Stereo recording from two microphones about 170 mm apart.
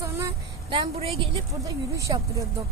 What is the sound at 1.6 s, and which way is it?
Speech, 20° right (ahead or behind).